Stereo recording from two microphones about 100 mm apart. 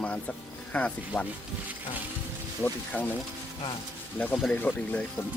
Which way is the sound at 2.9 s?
15° left (ahead or behind).